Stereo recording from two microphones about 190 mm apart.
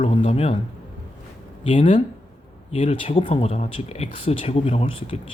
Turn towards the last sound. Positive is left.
turn(degrees=30)  # may be behind; listen again after turning